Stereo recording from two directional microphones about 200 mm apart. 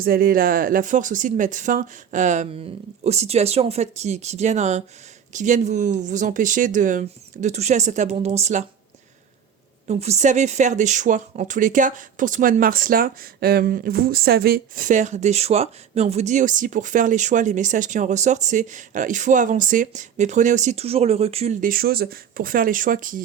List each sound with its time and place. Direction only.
0.0 s speech: 45° right (ahead or behind)
9.8 s speech: 35° right (ahead or behind)